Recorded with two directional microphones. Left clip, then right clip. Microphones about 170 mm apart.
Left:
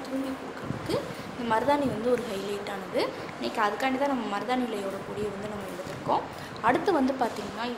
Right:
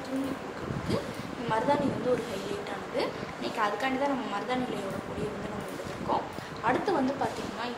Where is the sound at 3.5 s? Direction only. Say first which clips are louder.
Left 2 dB; 65° left (ahead or behind).